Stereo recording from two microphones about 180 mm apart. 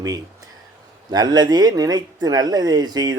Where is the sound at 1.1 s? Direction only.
20° right (ahead or behind).